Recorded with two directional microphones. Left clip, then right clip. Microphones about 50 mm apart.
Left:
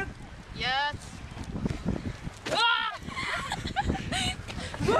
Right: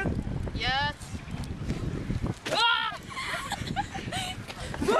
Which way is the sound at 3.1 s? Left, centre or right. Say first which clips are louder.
Left 1 dB; left.